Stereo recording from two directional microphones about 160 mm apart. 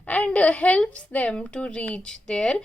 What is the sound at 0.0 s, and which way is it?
A woman's voice, 10° left (ahead or behind).